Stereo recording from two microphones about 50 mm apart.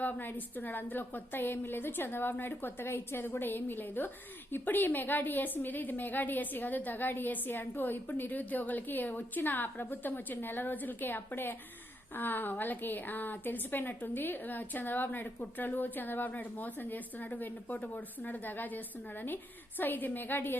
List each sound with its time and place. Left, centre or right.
0.0 s a woman's voice: left